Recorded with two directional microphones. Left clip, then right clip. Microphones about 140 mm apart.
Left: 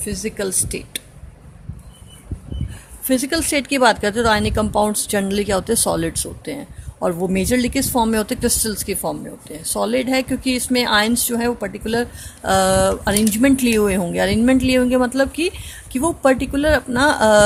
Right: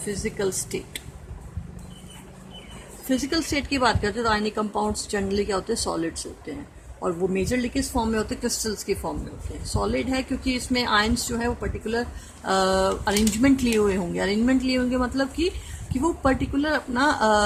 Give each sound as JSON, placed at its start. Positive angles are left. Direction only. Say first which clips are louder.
{"t": 0.1, "sound": "speech", "louder": "left 3 dB", "side_deg": 50}
{"t": 3.1, "sound": "speech", "louder": "left 6 dB", "side_deg": 55}